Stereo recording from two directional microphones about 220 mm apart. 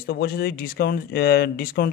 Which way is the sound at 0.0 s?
45° left (ahead or behind).